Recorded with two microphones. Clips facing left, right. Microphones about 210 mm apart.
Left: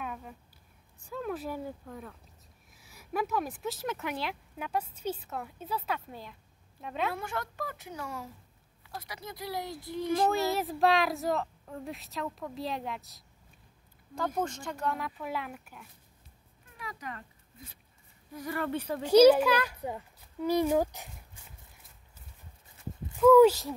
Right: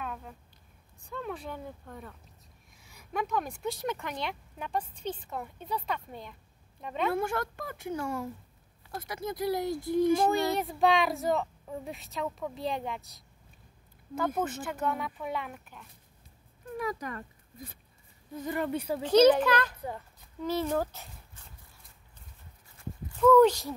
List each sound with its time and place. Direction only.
0.0 s a sound: 5° left (ahead or behind)
1.0 s a woman's voice: 5° left (ahead or behind)
7.2 s speech: 50° right (ahead or behind)
10.3 s speech: centre (ahead or behind)
16.7 s a sound: 45° right (ahead or behind)
18.3 s speech: 20° right (ahead or behind)
19.0 s a child's voice: 10° left (ahead or behind)
23.1 s a child's voice: 10° left (ahead or behind)